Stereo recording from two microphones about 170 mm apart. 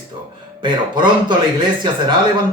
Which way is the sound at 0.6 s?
25° right (ahead or behind).